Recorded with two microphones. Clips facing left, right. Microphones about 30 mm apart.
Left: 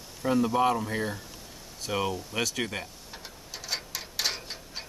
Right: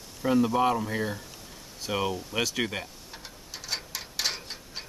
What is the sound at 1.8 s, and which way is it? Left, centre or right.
Tick-tock, centre.